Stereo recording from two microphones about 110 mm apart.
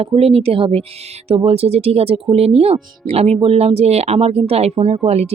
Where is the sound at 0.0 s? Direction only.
65° right (ahead or behind).